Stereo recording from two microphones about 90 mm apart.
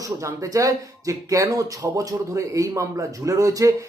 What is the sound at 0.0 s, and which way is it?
Speech, 35° right (ahead or behind).